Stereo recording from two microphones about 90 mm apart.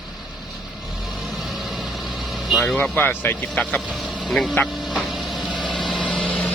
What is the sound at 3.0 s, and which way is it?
Speech, 25° left (ahead or behind).